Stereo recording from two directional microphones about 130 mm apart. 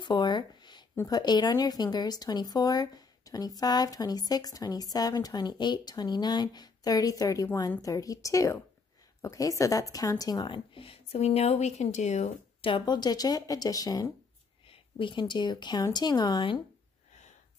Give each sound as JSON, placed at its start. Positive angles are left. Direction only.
{"t": 0.0, "sound": "a sound", "side_deg": 35}
{"t": 0.9, "sound": "a woman's voice", "side_deg": 30}
{"t": 14.7, "sound": "a woman's voice", "side_deg": 40}